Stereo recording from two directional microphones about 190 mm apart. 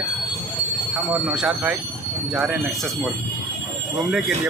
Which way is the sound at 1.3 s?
5° right (ahead or behind).